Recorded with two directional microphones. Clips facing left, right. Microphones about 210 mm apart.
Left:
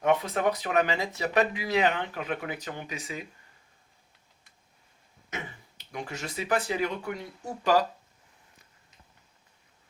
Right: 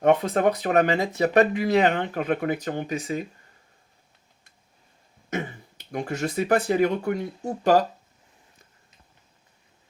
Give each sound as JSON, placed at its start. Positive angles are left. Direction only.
{"t": 0.0, "sound": "speech", "side_deg": -55}
{"t": 5.3, "sound": "speech", "side_deg": -50}